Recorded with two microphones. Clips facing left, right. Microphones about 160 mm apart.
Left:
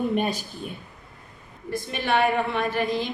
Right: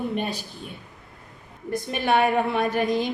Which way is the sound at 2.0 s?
45° right (ahead or behind).